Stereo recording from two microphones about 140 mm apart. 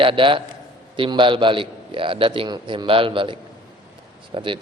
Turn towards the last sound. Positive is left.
turn(degrees=-40)  # may be behind; listen again after turning